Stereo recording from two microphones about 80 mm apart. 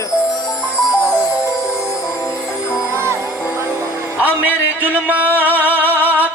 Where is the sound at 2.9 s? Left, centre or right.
Left.